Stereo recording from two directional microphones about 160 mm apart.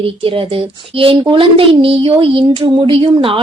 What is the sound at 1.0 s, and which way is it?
A woman's voice, 35° right (ahead or behind).